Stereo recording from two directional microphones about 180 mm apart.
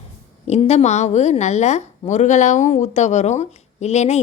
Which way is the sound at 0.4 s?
35° left (ahead or behind).